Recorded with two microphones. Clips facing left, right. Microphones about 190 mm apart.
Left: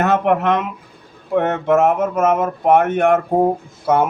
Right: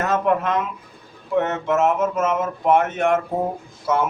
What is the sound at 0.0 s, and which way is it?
Speech, 70° left (ahead or behind).